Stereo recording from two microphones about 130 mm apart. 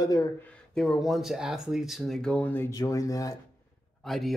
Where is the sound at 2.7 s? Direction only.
25° left (ahead or behind).